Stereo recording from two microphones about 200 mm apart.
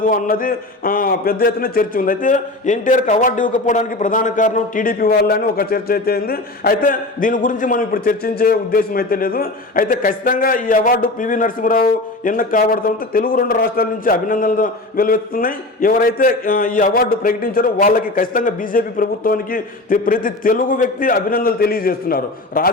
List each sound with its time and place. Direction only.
0.0 s a man's voice: 45° left (ahead or behind)